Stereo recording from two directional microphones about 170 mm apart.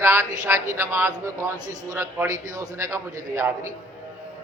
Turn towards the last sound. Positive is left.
turn(degrees=-15)  # may be behind; listen again after turning